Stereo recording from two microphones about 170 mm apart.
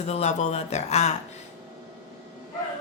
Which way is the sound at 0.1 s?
40° left (ahead or behind).